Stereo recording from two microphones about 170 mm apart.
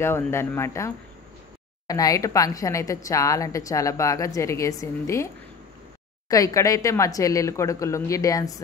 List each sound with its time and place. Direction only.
0.0 s a woman's voice: 15° left (ahead or behind)